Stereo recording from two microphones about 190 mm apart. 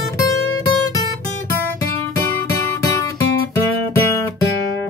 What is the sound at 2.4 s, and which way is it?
Music, 15° left (ahead or behind).